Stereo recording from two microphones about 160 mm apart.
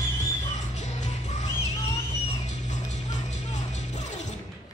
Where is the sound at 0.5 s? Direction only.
45° left (ahead or behind).